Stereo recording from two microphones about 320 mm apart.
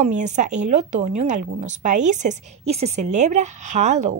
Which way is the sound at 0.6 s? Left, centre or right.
Right.